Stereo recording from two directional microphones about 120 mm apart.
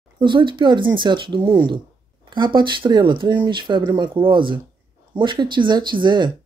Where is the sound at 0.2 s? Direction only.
45° right (ahead or behind).